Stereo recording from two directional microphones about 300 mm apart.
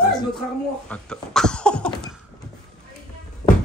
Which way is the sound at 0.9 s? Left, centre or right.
Centre.